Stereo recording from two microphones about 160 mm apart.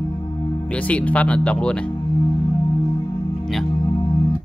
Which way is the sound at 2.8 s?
30° left (ahead or behind).